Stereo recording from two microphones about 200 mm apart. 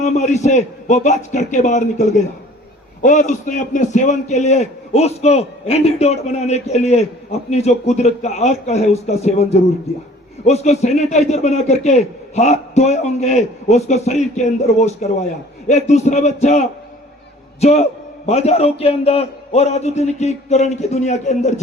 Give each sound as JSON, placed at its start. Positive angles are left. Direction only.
{"t": 0.0, "sound": "a man's voice", "side_deg": 35}